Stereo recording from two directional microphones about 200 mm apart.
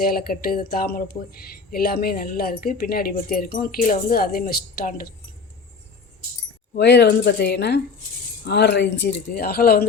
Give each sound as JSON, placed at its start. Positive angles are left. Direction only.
{"t": 0.0, "sound": "speech", "side_deg": 50}
{"t": 6.7, "sound": "speech", "side_deg": 60}